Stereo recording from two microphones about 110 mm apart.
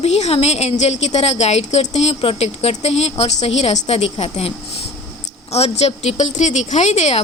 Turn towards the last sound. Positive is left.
turn(degrees=85)